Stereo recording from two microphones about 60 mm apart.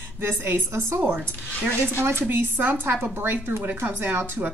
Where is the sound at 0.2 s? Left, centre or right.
Right.